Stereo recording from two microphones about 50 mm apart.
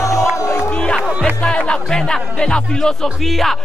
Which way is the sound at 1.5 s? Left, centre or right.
Centre.